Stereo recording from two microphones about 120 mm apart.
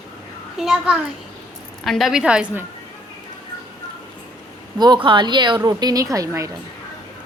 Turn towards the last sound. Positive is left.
turn(degrees=-25)  # may be behind; listen again after turning